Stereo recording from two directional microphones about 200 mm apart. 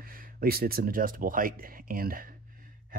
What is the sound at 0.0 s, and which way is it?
Speech, 45° right (ahead or behind).